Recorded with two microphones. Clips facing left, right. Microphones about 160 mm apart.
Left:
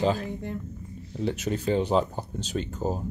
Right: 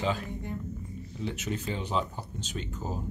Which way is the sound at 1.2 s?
35° left (ahead or behind).